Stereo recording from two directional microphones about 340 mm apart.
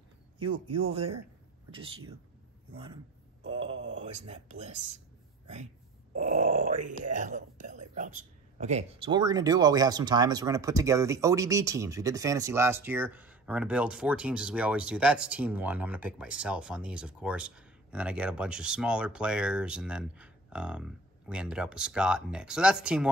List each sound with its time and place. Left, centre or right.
0.7 s speech: centre
2.7 s speech: centre
3.4 s mantra: centre
3.8 s speech: centre
6.1 s speech: right; by 23.0 s centre